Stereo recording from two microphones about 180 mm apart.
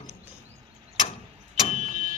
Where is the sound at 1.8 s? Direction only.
40° right (ahead or behind).